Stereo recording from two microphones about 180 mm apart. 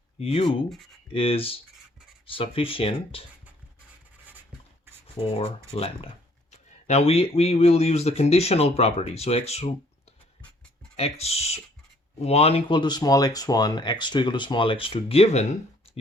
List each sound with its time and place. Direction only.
0.2 s speech: 30° left (ahead or behind)
4.9 s rub: 10° right (ahead or behind)
5.2 s speech: 35° left (ahead or behind)
10.9 s speech: 35° left (ahead or behind)